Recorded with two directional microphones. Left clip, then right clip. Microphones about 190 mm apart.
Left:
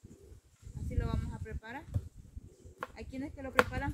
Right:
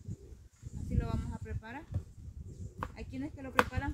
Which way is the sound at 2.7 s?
15° left (ahead or behind).